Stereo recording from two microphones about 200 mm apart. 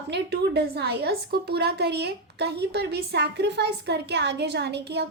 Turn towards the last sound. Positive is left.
turn(degrees=-55)  # may be behind; listen again after turning